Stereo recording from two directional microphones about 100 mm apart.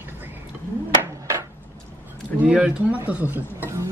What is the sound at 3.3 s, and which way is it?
Speech, 25° right (ahead or behind).